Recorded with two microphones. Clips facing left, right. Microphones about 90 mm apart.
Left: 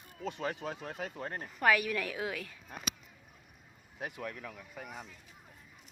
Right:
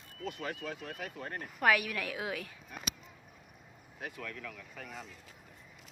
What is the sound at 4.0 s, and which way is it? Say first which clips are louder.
Speech: left 2 dB; 20° left (ahead or behind).